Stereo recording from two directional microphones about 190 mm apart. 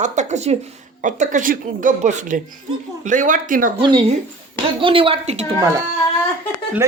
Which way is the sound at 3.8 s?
25° right (ahead or behind).